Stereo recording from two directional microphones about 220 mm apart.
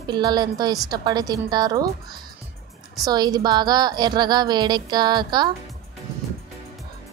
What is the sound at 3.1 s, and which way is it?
A woman's voice, 20° right (ahead or behind).